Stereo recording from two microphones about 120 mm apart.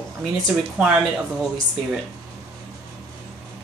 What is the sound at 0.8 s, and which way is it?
Speech, 10° right (ahead or behind).